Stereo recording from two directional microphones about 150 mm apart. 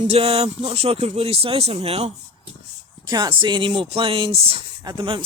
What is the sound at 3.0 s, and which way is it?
Speech, 30° right (ahead or behind).